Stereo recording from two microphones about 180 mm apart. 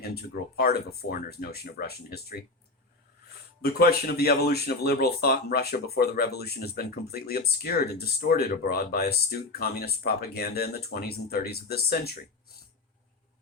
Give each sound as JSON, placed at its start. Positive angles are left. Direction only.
{"t": 0.1, "sound": "speech", "side_deg": 60}
{"t": 3.6, "sound": "speech", "side_deg": 60}